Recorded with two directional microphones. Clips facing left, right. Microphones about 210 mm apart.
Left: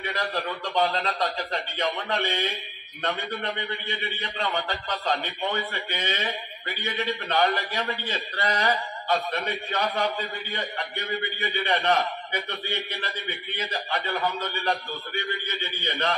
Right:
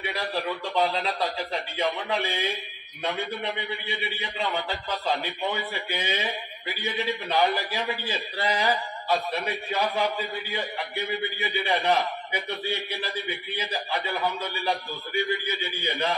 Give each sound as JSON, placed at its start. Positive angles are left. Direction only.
{"t": 0.0, "sound": "a man's voice", "side_deg": 0}
{"t": 15.8, "sound": "a man's voice", "side_deg": -15}